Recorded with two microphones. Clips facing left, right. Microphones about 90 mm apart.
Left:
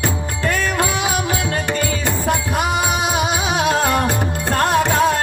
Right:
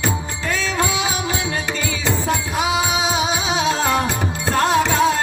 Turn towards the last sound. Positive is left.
turn(degrees=50)  # may be behind; listen again after turning